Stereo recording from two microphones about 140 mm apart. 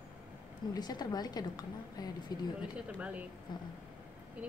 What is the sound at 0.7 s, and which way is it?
A woman's voice, 30° left (ahead or behind).